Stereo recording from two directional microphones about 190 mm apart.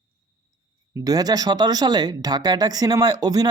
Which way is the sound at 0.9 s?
20° right (ahead or behind).